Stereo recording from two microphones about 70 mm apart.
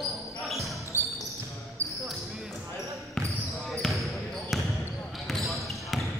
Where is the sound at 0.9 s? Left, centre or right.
Right.